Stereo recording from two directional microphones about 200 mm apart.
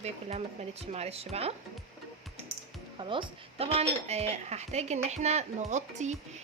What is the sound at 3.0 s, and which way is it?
Speech, 25° right (ahead or behind).